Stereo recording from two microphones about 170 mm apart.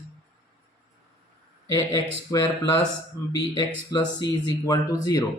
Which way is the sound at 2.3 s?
20° left (ahead or behind).